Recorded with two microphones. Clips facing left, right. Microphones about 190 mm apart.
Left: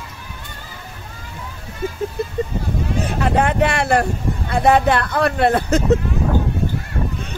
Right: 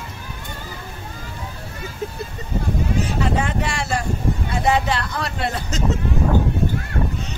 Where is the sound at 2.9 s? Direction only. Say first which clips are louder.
Left 5 dB; 60° left (ahead or behind).